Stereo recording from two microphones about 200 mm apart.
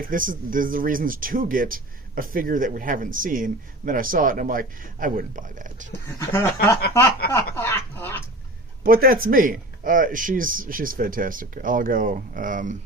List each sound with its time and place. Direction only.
0.0 s speech: 45° right (ahead or behind)
6.1 s speech: 10° left (ahead or behind)
8.8 s speech: 45° right (ahead or behind)